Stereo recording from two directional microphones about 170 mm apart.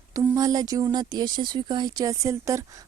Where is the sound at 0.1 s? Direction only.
20° right (ahead or behind).